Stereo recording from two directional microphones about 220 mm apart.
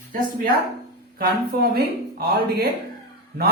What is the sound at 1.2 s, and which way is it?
Speech, 45° right (ahead or behind).